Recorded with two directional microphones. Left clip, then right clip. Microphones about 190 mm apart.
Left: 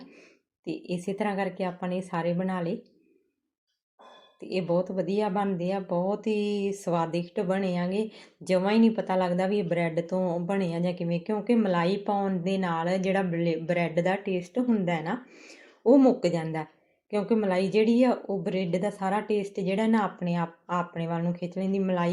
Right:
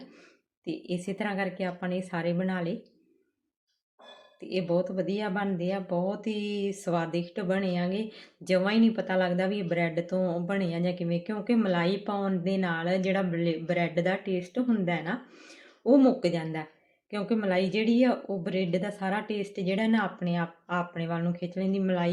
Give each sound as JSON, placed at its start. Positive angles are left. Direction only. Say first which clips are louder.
{"t": 0.6, "sound": "speech", "louder": "left 1 dB", "side_deg": 0}
{"t": 4.4, "sound": "speech", "louder": "left 1 dB", "side_deg": 5}
{"t": 14.3, "sound": "speech", "louder": "left 2 dB", "side_deg": 15}
{"t": 14.7, "sound": "speech", "louder": "left 2 dB", "side_deg": 0}